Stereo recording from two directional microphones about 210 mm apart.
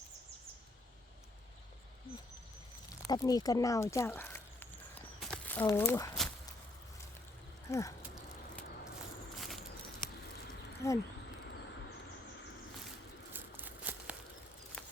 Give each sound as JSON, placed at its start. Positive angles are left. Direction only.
{"t": 3.0, "sound": "speech", "side_deg": 15}
{"t": 5.2, "sound": "crumpling", "side_deg": 5}
{"t": 7.7, "sound": "speech", "side_deg": 15}
{"t": 10.8, "sound": "speech", "side_deg": 15}
{"t": 13.3, "sound": "a sound", "side_deg": -10}